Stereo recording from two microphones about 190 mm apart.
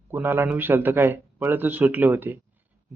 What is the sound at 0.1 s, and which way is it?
Speech, 10° right (ahead or behind).